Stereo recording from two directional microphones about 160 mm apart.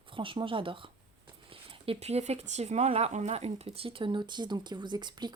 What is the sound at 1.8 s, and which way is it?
Speech, 40° right (ahead or behind).